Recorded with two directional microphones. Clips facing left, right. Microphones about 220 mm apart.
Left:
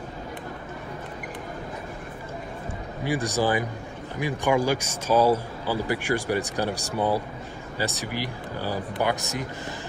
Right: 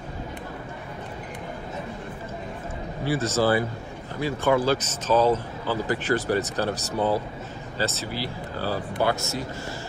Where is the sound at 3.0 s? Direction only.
15° left (ahead or behind).